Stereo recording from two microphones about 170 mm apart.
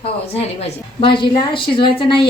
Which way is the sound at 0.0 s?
35° left (ahead or behind).